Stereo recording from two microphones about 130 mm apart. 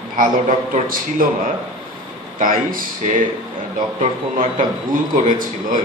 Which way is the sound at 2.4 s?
90° right.